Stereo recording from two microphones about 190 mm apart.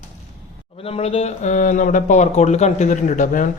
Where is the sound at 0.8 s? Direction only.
30° left (ahead or behind).